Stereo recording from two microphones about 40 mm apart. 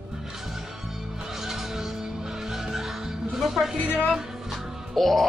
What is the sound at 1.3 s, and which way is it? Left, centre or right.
Music, centre.